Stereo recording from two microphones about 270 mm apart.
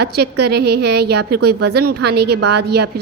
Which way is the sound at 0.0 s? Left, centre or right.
Right.